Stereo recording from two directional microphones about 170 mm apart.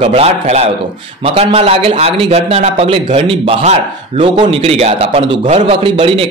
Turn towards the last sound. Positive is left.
turn(degrees=-30)  # may be behind; listen again after turning